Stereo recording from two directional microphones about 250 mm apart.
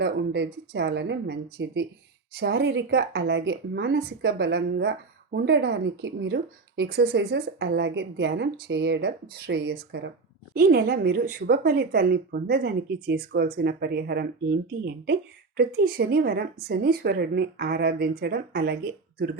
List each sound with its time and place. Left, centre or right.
0.0 s speech: right
15.5 s speech: right